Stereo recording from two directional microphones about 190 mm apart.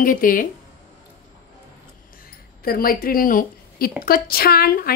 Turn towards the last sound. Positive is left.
turn(degrees=50)  # may be behind; listen again after turning